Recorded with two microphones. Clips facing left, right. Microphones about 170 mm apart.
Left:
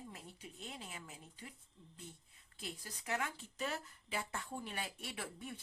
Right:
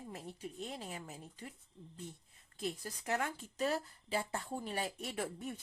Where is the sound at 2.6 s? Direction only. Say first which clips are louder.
Right 8 dB; 40° right (ahead or behind).